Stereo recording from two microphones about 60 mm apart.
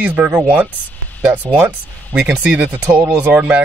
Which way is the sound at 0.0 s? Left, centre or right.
Right.